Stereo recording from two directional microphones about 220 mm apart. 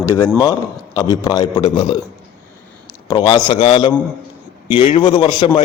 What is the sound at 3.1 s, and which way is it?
A man's voice, 20° left (ahead or behind).